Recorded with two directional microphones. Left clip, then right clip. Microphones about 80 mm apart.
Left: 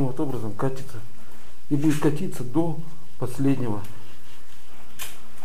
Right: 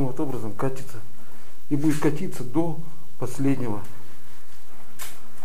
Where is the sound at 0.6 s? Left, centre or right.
Centre.